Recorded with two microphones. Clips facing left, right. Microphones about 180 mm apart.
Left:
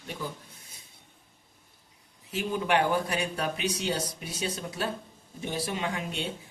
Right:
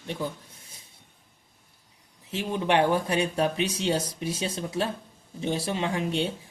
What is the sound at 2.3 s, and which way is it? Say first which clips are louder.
A man's voice: right 2 dB; 25° right (ahead or behind).